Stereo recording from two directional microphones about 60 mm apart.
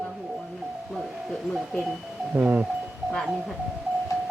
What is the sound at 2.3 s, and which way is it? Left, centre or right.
Livestock, right.